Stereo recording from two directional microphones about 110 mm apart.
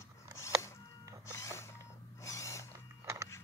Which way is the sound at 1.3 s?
25° left (ahead or behind).